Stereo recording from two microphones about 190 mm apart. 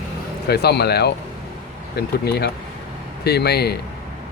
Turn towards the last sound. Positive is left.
turn(degrees=60)  # may be behind; listen again after turning